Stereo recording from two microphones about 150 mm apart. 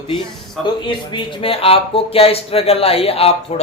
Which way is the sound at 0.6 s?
30° left (ahead or behind).